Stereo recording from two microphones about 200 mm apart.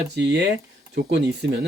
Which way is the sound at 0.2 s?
60° right (ahead or behind).